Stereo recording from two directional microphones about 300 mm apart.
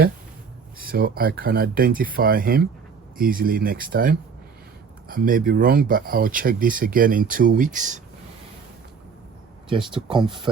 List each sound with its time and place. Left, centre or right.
0.8 s speech: right
9.6 s speech: centre